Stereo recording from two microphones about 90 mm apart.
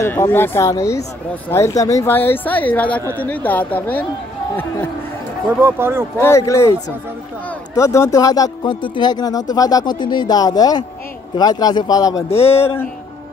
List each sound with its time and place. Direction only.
0.0 s speech: 30° left (ahead or behind)
0.7 s speech: 35° left (ahead or behind)
2.1 s speech: 20° left (ahead or behind)
5.5 s speech: 25° right (ahead or behind)
6.1 s speech: 30° left (ahead or behind)
7.7 s speech: 35° left (ahead or behind)
8.6 s speech: 60° left (ahead or behind); by 12.3 s 45° left (ahead or behind)